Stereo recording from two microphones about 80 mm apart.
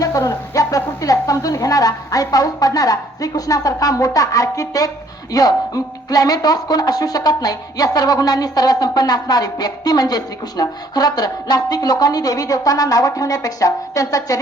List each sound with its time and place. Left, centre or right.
0.0 s speech: left